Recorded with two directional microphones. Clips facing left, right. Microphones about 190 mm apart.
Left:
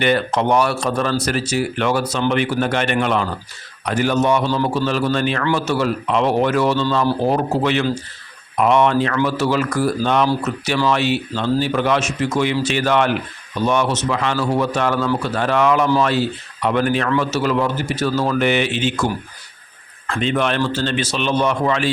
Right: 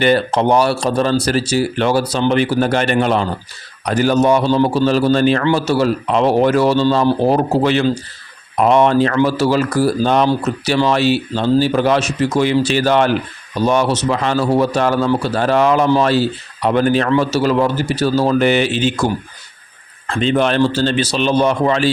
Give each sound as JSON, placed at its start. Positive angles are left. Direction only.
{"t": 0.0, "sound": "a man's voice", "side_deg": -35}
{"t": 20.1, "sound": "a man's voice", "side_deg": -30}